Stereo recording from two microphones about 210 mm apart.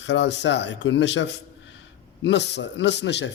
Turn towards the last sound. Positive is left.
turn(degrees=55)  # may be behind; listen again after turning